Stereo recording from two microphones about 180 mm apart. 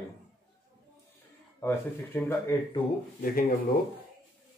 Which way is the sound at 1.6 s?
10° left (ahead or behind).